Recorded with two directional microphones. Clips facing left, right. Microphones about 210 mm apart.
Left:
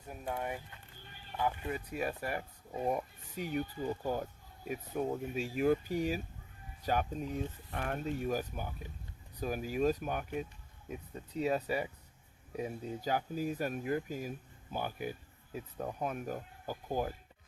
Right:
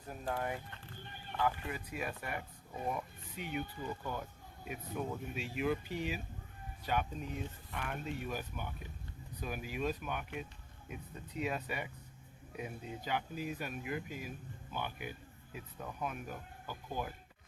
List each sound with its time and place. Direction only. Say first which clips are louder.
0.1 s speech: even; 10° left (ahead or behind)
1.7 s speech: left 4 dB; 35° left (ahead or behind)